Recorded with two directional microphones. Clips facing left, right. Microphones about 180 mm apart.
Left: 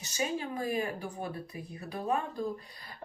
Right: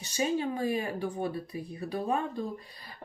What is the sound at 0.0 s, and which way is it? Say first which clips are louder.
Speech: right 4 dB; 30° right (ahead or behind).